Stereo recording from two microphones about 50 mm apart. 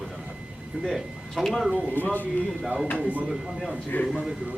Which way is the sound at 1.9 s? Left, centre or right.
Left.